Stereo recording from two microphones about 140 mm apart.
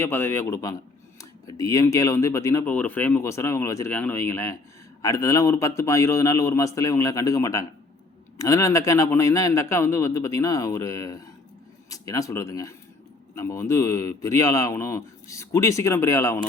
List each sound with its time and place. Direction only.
0.0 s speech: 15° left (ahead or behind)
2.6 s speech: 10° left (ahead or behind)